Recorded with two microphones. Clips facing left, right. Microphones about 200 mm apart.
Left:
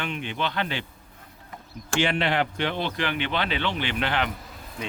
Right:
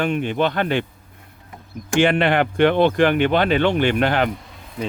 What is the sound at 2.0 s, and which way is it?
Speech, 55° right (ahead or behind).